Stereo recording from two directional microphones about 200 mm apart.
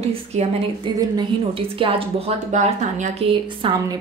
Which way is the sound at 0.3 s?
35° right (ahead or behind).